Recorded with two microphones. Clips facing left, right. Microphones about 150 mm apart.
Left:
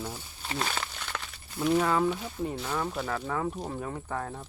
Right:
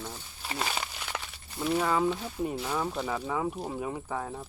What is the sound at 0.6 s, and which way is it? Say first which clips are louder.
Crumpling: even; 10° right (ahead or behind).